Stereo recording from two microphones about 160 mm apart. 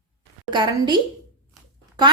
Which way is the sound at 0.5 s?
30° right (ahead or behind).